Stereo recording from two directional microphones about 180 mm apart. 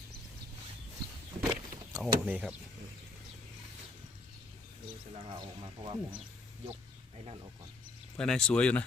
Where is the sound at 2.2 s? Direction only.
10° right (ahead or behind).